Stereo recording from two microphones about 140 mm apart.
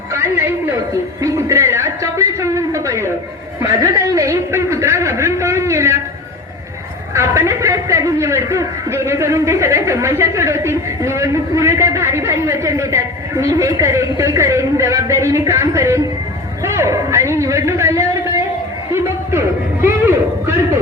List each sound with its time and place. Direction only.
0.1 s a sound: 20° right (ahead or behind)
1.2 s a man's voice: 20° right (ahead or behind)
7.1 s a man's voice: 20° right (ahead or behind)